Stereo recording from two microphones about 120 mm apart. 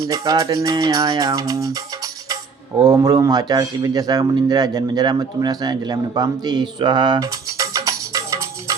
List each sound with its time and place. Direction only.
0.1 s music: 30° right (ahead or behind)
2.3 s speech: 30° right (ahead or behind)